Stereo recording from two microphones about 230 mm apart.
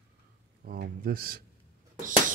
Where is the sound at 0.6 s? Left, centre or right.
Right.